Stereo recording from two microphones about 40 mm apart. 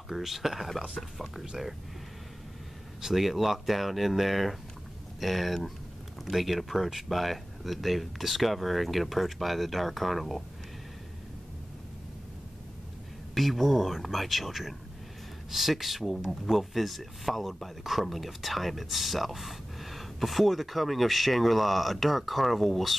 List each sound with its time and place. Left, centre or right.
0.1 s speech: centre
3.0 s speech: centre
13.3 s speech: centre